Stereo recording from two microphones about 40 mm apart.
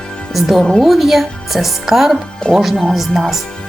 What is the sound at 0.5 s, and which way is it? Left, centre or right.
Speech, centre.